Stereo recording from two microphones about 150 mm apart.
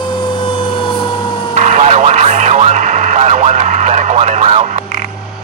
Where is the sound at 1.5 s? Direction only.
50° right (ahead or behind).